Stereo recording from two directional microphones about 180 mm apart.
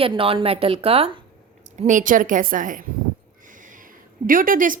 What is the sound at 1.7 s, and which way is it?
A woman's voice, 45° right (ahead or behind).